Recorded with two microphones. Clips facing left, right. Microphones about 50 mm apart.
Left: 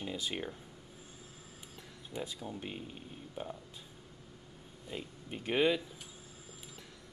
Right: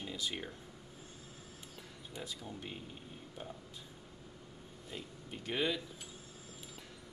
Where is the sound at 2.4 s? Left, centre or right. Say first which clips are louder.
Left 4 dB; centre.